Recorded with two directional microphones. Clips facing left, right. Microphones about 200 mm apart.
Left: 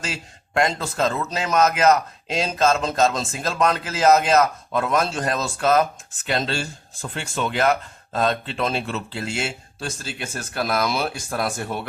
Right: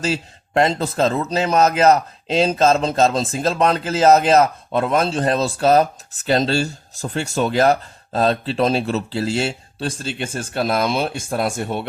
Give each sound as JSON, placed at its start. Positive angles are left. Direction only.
{"t": 0.0, "sound": "speech", "side_deg": -30}